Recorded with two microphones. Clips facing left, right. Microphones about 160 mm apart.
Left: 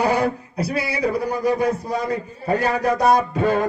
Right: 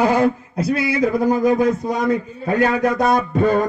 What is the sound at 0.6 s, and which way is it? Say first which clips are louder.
Music: right 4 dB; 50° right (ahead or behind).